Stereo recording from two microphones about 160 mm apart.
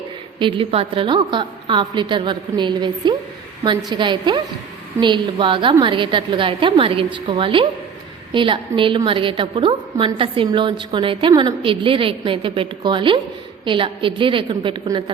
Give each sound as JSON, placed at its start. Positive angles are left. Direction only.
{"t": 0.3, "sound": "a woman's voice", "side_deg": -30}